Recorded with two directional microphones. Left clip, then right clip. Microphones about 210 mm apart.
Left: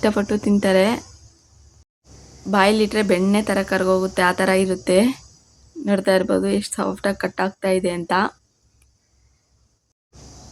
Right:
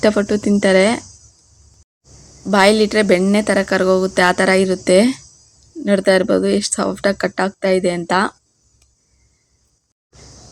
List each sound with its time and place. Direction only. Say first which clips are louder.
0.0 s a woman's voice: right 5 dB; 15° right (ahead or behind)
2.5 s a woman's voice: right 4 dB; 20° right (ahead or behind)